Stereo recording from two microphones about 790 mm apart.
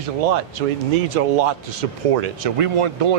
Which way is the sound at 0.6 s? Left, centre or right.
Right.